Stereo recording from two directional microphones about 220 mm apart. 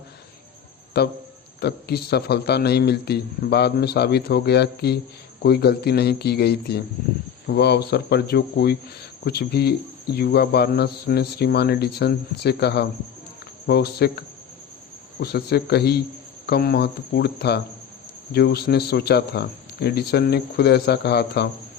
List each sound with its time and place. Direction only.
0.9 s speech: 50° left (ahead or behind)